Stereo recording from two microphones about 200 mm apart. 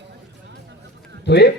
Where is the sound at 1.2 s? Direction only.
55° left (ahead or behind).